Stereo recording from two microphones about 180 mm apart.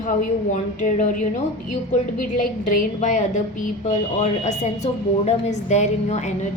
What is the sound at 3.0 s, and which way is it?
A woman's voice, 40° left (ahead or behind).